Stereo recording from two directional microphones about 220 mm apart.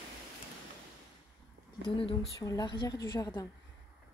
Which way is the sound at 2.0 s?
25° left (ahead or behind).